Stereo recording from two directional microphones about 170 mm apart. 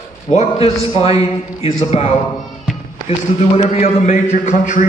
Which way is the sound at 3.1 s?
35° left (ahead or behind).